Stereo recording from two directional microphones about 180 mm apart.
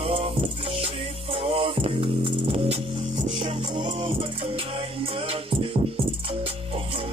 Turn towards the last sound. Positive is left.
turn(degrees=-30)  # may be behind; listen again after turning